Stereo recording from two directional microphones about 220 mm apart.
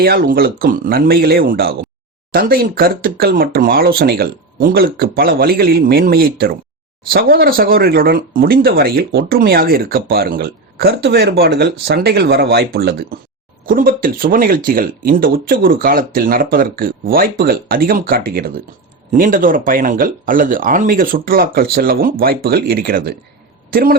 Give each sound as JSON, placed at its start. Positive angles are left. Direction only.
{"t": 0.0, "sound": "speech", "side_deg": -45}